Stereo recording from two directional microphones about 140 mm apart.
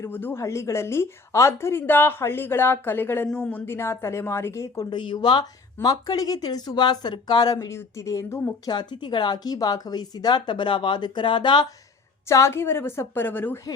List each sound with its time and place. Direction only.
0.0 s a woman's voice: 15° left (ahead or behind)
8.7 s a woman's voice: 30° left (ahead or behind)
12.3 s a woman's voice: 20° left (ahead or behind)